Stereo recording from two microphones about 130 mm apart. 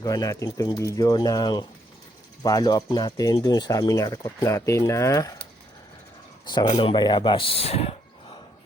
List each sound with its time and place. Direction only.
0.0 s speech: 30° left (ahead or behind)
6.4 s a man's voice: 35° left (ahead or behind); by 8.4 s 50° left (ahead or behind)